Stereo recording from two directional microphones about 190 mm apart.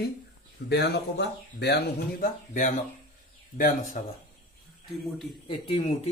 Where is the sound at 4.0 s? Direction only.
40° left (ahead or behind).